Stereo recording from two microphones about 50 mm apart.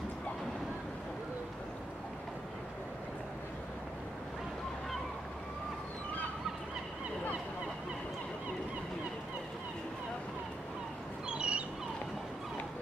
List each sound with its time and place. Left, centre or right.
11.2 s dog: right